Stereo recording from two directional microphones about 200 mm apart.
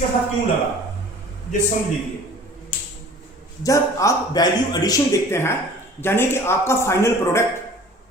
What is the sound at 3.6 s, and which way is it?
Speech, 15° left (ahead or behind).